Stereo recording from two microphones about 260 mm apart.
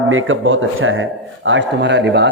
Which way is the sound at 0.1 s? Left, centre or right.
Right.